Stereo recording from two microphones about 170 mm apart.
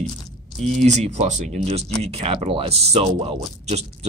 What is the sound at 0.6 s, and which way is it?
Speech, 45° right (ahead or behind).